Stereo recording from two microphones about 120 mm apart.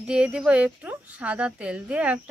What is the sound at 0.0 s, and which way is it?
Speech, 10° right (ahead or behind).